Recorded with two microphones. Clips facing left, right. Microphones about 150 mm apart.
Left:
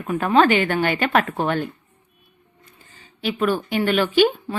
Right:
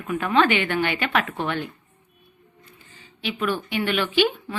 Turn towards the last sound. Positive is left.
turn(degrees=40)  # may be behind; listen again after turning